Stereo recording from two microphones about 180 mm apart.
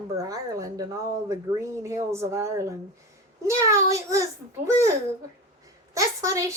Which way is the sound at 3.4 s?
15° right (ahead or behind).